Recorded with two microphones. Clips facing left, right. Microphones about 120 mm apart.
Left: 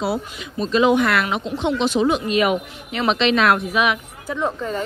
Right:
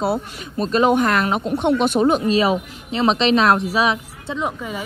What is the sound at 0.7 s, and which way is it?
Speech, 45° right (ahead or behind).